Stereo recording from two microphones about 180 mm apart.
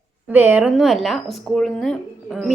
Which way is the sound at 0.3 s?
10° right (ahead or behind).